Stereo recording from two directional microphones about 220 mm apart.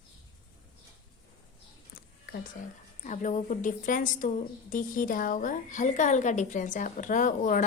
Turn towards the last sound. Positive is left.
turn(degrees=35)  # may be behind; listen again after turning